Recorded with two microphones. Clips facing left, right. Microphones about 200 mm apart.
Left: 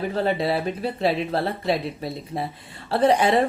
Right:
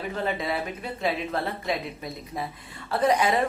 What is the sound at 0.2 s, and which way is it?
Speech, 30° left (ahead or behind).